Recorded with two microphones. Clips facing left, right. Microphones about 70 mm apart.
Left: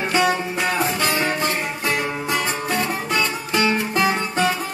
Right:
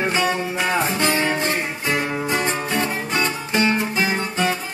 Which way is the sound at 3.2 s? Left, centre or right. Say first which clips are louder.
Right 1 dB; right.